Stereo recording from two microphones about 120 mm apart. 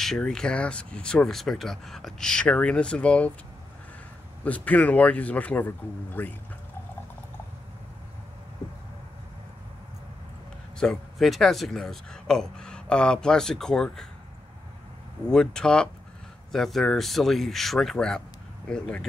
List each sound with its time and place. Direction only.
0.0 s speech: 5° left (ahead or behind)
4.5 s speech: 10° left (ahead or behind)
10.8 s speech: 5° left (ahead or behind)
15.2 s speech: 5° left (ahead or behind)